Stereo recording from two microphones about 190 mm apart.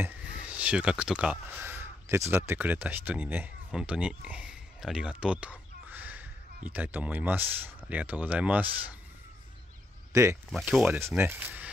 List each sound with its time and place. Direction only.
0.0 s speech: 5° right (ahead or behind)
5.2 s fowl: 5° right (ahead or behind)
6.7 s speech: 10° right (ahead or behind)
10.1 s speech: 15° right (ahead or behind)
10.5 s speech: centre (ahead or behind)